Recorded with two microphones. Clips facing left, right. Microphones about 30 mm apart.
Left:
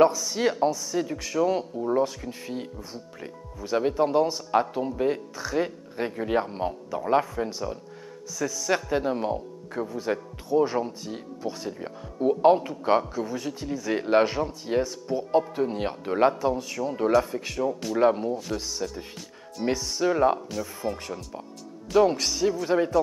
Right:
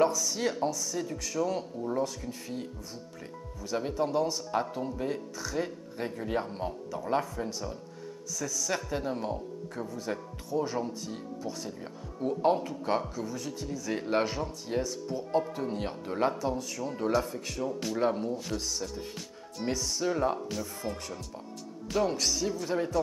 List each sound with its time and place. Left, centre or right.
0.0 s speech: left
20.3 s speech: centre; by 22.9 s left